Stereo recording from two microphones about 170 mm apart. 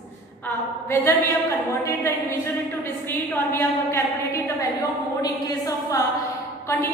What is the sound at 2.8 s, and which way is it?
A woman's voice, 15° left (ahead or behind).